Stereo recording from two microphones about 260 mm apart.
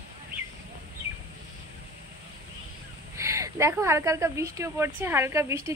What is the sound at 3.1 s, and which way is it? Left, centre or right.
Speech, centre.